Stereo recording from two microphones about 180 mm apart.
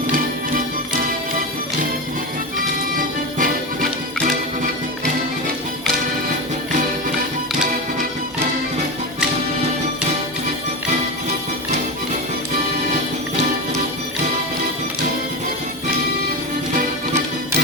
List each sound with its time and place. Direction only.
3.3 s music: 50° right (ahead or behind)